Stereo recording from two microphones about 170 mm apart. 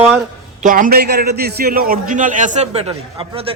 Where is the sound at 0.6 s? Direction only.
50° right (ahead or behind).